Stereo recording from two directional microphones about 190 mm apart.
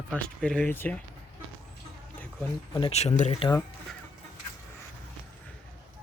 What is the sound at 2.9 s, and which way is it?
Speech, 35° left (ahead or behind).